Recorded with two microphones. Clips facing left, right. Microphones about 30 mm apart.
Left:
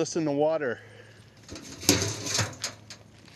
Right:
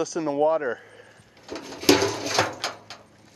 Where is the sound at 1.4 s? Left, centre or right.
Right.